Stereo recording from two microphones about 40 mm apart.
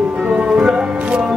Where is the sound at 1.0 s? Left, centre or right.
Right.